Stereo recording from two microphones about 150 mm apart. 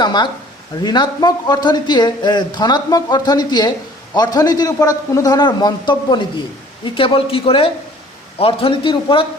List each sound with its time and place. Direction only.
0.0 s speech: 30° left (ahead or behind)